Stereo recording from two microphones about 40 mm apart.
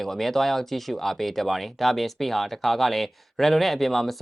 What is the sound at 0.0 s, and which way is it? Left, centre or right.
Speech, centre.